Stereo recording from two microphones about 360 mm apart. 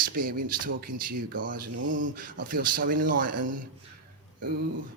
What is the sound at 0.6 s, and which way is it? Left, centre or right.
Speech, right.